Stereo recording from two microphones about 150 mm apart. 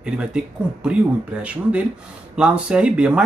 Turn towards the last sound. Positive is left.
turn(degrees=-5)  # may be behind; listen again after turning